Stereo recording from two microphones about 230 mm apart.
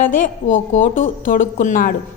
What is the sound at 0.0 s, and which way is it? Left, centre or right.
A woman's voice, left.